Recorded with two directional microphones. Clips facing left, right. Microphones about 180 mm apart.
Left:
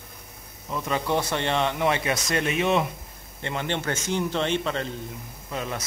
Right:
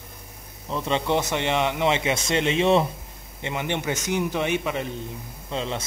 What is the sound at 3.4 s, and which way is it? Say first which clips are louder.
Speech: right 1 dB; 15° right (ahead or behind).